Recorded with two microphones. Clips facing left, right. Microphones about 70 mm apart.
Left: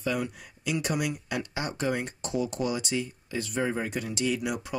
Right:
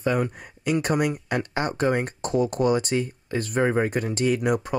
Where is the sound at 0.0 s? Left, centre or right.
Right.